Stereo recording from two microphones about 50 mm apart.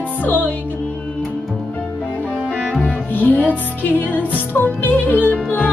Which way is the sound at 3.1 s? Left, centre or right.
Left.